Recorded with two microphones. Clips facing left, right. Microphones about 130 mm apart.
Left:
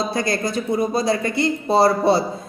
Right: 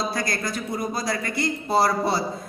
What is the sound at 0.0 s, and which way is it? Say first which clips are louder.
A woman's voice: left 5 dB; 25° left (ahead or behind).